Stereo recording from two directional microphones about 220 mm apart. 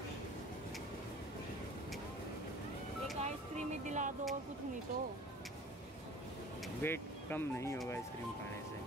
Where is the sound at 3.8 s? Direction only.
35° right (ahead or behind).